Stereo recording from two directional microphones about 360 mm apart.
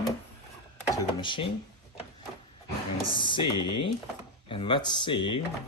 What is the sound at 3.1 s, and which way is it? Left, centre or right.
Speech, centre.